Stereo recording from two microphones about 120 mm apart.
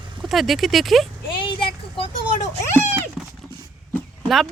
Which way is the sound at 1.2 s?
45° left (ahead or behind).